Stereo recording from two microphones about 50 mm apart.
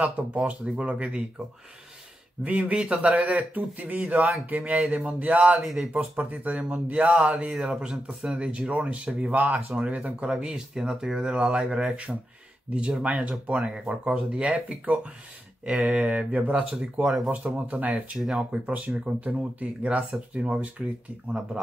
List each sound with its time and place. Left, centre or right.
0.0 s speech: right
2.4 s speech: right
5.6 s speech: centre
5.9 s speech: right
18.1 s speech: centre
19.0 s speech: right